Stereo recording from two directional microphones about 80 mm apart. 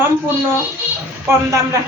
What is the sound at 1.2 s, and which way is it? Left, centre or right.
Speech, right.